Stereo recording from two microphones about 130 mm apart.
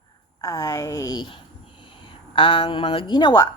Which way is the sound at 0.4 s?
25° left (ahead or behind).